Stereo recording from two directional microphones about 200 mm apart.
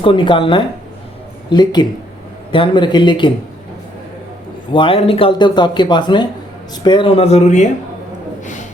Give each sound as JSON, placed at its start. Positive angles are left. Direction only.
{"t": 0.0, "sound": "speech", "side_deg": 25}
{"t": 4.7, "sound": "speech", "side_deg": 25}